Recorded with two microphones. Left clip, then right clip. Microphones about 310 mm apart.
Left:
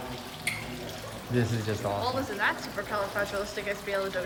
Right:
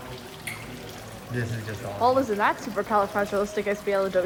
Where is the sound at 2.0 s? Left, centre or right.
Centre.